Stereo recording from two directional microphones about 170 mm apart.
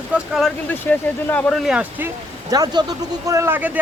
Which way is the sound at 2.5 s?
25° right (ahead or behind).